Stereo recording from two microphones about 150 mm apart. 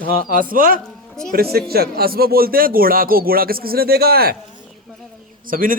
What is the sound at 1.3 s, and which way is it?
A man's voice, 90° right.